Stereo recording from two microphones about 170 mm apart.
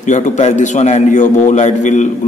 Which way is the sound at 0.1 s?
45° left (ahead or behind).